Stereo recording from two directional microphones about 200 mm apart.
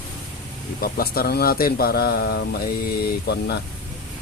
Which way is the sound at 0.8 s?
50° left (ahead or behind).